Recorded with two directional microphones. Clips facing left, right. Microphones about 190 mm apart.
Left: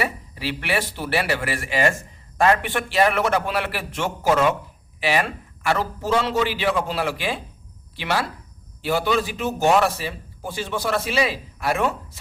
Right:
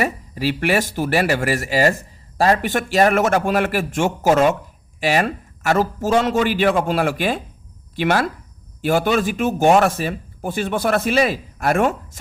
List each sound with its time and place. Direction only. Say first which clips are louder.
0.0 s a man's voice: right 6 dB; 45° right (ahead or behind)